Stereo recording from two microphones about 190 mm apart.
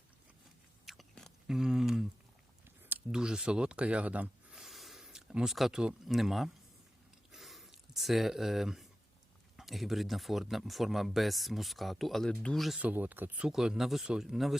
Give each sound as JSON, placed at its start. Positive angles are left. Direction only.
{"t": 0.9, "sound": "chewing", "side_deg": 0}
{"t": 2.6, "sound": "a sound", "side_deg": -5}
{"t": 9.6, "sound": "speech", "side_deg": 0}